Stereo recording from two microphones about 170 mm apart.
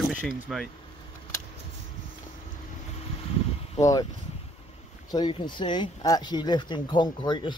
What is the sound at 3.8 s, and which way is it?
Speech, 20° left (ahead or behind).